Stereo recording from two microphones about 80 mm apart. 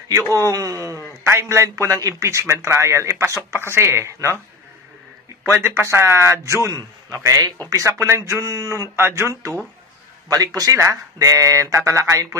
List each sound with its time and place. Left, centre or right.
0.3 s speech: right
1.2 s a man's voice: right
5.6 s a man's voice: right